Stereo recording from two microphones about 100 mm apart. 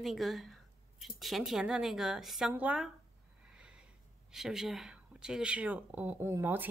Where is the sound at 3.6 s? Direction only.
10° right (ahead or behind).